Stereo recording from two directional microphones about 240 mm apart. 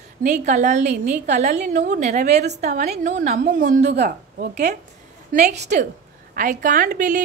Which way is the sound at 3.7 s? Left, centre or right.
Right.